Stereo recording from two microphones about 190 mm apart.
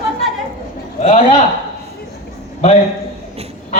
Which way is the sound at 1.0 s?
35° left (ahead or behind).